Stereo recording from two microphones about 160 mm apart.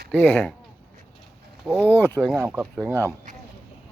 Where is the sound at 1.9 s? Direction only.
15° left (ahead or behind).